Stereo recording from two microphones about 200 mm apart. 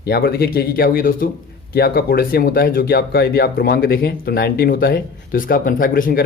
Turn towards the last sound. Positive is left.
turn(degrees=45)  # may be behind; listen again after turning